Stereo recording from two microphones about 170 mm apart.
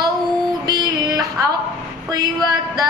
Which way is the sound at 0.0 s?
25° right (ahead or behind).